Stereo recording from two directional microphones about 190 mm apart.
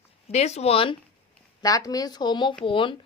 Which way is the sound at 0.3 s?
35° left (ahead or behind).